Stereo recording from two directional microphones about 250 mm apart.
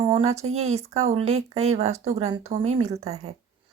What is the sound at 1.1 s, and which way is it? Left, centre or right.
Speech, right.